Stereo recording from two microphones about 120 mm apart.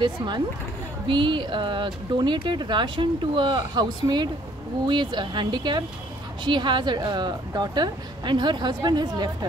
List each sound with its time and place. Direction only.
0.0 s a woman's voice: 40° right (ahead or behind)